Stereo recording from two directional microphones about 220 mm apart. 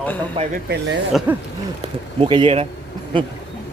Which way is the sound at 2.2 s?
25° right (ahead or behind).